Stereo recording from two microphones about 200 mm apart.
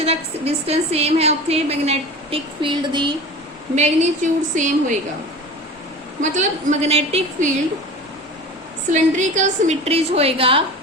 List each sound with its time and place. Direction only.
0.0 s a woman's voice: 30° right (ahead or behind)
3.8 s a woman's voice: 35° right (ahead or behind)
6.3 s a woman's voice: 35° right (ahead or behind)
8.9 s a woman's voice: 35° right (ahead or behind)